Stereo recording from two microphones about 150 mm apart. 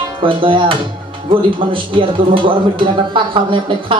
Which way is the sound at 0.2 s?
35° right (ahead or behind).